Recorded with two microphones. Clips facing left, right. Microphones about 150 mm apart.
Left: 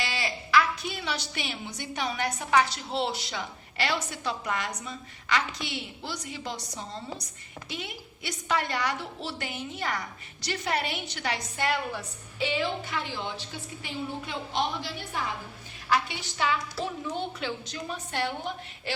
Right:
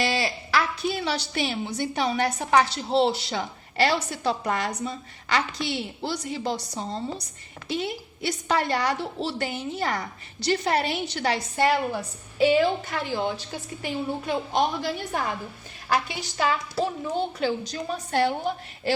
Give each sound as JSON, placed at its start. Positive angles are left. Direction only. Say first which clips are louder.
{"t": 0.0, "sound": "a woman's voice", "louder": "right 7 dB", "side_deg": -35}
{"t": 11.9, "sound": "a woman's voice", "louder": "right 9 dB", "side_deg": -45}